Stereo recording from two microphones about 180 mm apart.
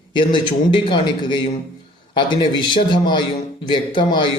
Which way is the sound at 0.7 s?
25° left (ahead or behind).